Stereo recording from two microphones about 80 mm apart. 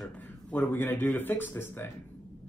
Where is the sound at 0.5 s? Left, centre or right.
Left.